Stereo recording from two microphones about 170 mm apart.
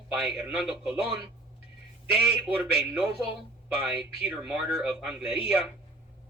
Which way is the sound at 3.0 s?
5° right (ahead or behind).